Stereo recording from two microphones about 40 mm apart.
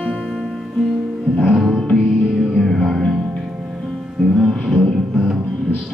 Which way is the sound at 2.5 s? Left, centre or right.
Centre.